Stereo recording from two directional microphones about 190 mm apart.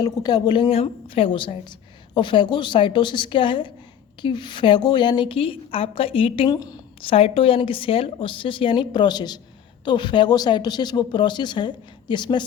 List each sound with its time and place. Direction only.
0.0 s a woman's voice: 20° left (ahead or behind)